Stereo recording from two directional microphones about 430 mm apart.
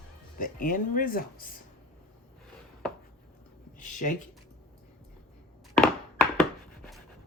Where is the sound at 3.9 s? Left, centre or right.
Centre.